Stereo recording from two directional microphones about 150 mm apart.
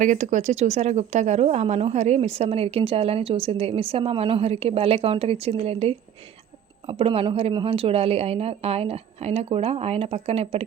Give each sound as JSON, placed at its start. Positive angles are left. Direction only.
{"t": 0.0, "sound": "speech", "side_deg": -55}